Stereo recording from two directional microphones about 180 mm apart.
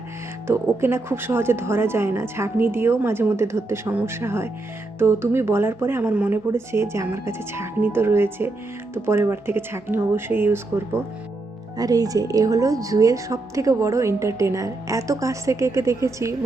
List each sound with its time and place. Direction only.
0.4 s speech: 15° right (ahead or behind)